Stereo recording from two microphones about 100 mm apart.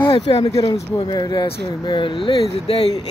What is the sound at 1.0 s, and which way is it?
Speech, 45° left (ahead or behind).